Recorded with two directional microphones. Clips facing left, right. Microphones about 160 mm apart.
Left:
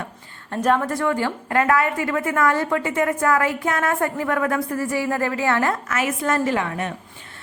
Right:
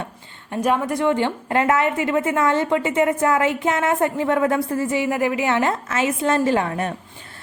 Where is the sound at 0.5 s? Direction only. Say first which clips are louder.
Even; 10° right (ahead or behind).